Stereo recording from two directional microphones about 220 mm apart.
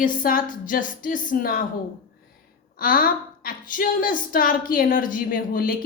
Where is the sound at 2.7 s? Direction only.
40° left (ahead or behind).